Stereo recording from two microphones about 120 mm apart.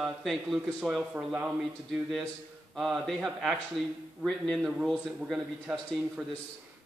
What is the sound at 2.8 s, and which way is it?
A man's voice, centre (ahead or behind).